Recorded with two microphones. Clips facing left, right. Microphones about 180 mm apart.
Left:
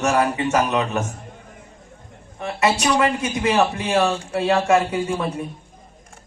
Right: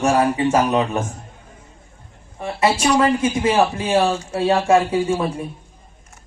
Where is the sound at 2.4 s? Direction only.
30° right (ahead or behind).